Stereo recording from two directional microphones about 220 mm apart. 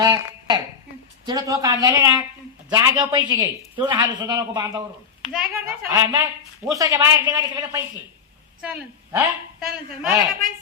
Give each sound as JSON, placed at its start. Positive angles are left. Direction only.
{"t": 0.0, "sound": "a sound", "side_deg": -20}
{"t": 1.2, "sound": "a man's voice", "side_deg": -15}
{"t": 5.3, "sound": "a man's voice", "side_deg": -5}